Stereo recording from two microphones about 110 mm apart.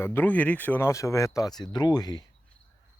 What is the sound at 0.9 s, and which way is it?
Speech, 30° left (ahead or behind).